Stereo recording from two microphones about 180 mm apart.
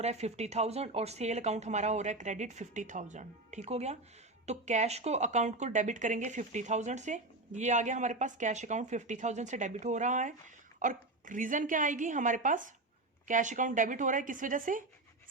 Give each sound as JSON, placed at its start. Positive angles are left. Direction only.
{"t": 0.0, "sound": "speech", "side_deg": -35}